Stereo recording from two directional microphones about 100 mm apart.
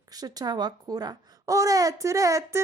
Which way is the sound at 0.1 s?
40° right (ahead or behind).